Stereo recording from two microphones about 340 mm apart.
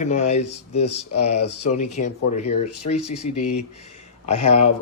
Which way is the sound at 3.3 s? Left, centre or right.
Left.